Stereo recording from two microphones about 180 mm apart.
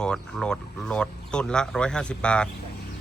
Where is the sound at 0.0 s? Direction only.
5° left (ahead or behind).